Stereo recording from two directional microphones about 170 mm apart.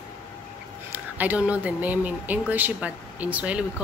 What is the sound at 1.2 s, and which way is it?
Speech, 10° right (ahead or behind).